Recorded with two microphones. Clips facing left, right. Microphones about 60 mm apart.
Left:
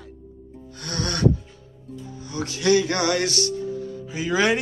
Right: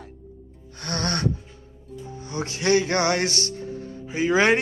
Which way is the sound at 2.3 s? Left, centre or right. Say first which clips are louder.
Left 1 dB; right.